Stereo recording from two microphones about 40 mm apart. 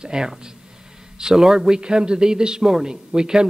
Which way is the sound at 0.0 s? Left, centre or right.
Centre.